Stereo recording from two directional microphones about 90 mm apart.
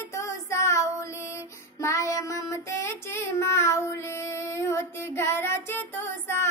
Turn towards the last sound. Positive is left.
turn(degrees=25)  # may be behind; listen again after turning